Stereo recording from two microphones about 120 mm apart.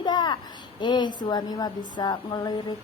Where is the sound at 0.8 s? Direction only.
40° left (ahead or behind).